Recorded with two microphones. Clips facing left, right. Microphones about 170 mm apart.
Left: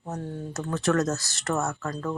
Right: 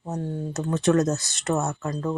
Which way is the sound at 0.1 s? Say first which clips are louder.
Right 4 dB; 20° right (ahead or behind).